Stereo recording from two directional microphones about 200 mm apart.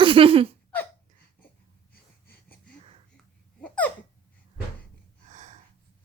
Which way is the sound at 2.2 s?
10° left (ahead or behind).